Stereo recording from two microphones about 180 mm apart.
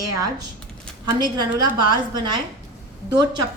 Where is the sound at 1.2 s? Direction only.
25° right (ahead or behind).